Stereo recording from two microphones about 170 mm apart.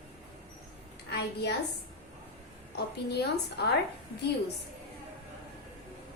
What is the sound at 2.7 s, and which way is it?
Speech, 75° left (ahead or behind).